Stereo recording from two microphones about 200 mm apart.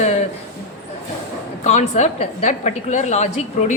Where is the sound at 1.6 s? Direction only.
35° left (ahead or behind).